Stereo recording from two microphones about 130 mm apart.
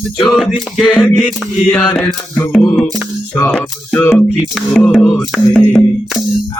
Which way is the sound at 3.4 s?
10° left (ahead or behind).